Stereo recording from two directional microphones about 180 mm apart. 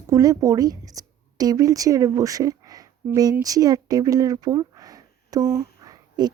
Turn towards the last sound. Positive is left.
turn(degrees=-20)  # may be behind; listen again after turning